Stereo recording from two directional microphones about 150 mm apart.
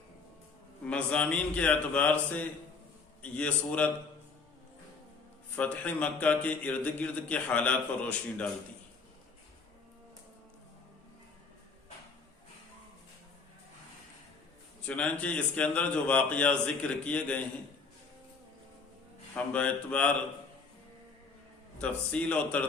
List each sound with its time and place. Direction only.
0.9 s a man's voice: 10° left (ahead or behind)
5.5 s a man's voice: 10° left (ahead or behind)
14.8 s a man's voice: 10° left (ahead or behind)
19.3 s a man's voice: 10° left (ahead or behind)
21.8 s a man's voice: 10° left (ahead or behind)